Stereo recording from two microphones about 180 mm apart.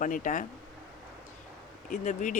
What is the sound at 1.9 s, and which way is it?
Speech, 45° left (ahead or behind).